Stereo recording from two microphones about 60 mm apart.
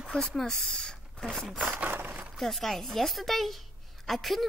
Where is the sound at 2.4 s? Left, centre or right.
Centre.